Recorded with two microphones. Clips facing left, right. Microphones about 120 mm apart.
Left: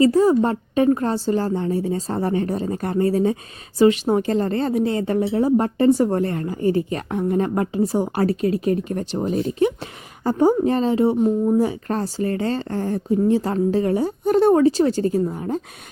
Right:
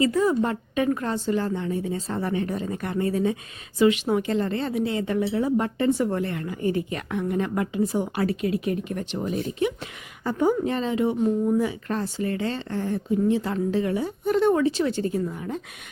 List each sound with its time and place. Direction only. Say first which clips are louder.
0.0 s a woman's voice: left 6 dB; 35° left (ahead or behind)